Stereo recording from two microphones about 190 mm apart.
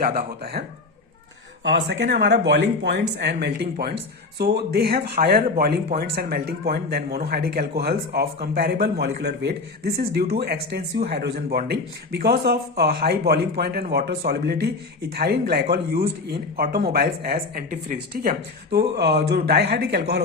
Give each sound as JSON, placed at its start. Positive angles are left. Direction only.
{"t": 0.0, "sound": "a man's voice", "side_deg": -55}
{"t": 1.6, "sound": "a man's voice", "side_deg": -70}